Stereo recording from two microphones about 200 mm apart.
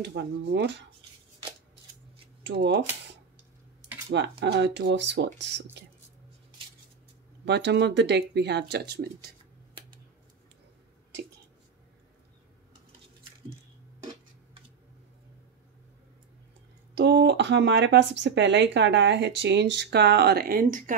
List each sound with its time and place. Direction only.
0.0 s speech: 55° right (ahead or behind)
2.4 s speech: 60° right (ahead or behind)
4.1 s speech: 55° right (ahead or behind)
7.4 s speech: 60° right (ahead or behind)
16.9 s speech: 60° right (ahead or behind); by 20.9 s 45° right (ahead or behind)